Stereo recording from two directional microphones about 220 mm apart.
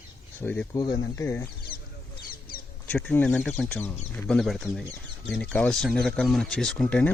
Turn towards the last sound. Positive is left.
turn(degrees=5)  # may be behind; listen again after turning